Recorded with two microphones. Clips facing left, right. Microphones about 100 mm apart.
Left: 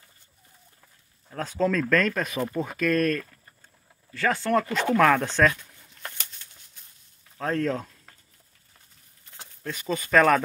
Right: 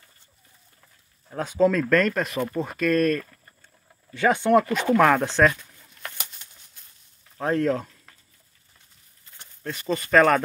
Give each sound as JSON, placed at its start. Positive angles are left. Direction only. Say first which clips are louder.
{"t": 1.3, "sound": "speech", "louder": "right 4 dB", "side_deg": -5}
{"t": 4.1, "sound": "speech", "louder": "right 5 dB", "side_deg": -20}
{"t": 7.3, "sound": "speech", "louder": "right 3 dB", "side_deg": -5}
{"t": 9.6, "sound": "speech", "louder": "right 2 dB", "side_deg": 0}